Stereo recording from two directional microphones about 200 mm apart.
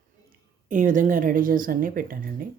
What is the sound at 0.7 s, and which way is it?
Speech, 40° right (ahead or behind).